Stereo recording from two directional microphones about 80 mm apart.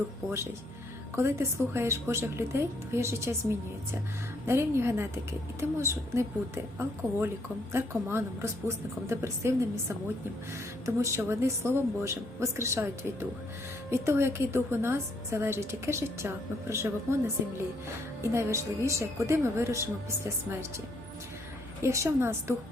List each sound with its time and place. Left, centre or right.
1.1 s a woman's voice: right
10.8 s a woman's voice: right
18.2 s a woman's voice: right
21.8 s a woman's voice: right